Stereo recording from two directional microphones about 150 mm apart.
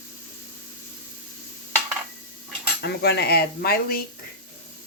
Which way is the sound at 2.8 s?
90° left.